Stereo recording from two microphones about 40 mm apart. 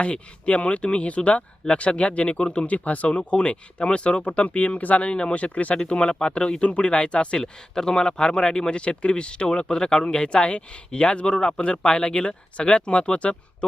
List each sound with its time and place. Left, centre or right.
0.0 s speech: left
5.7 s speech: left